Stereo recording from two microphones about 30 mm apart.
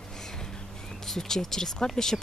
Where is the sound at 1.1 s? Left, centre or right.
Centre.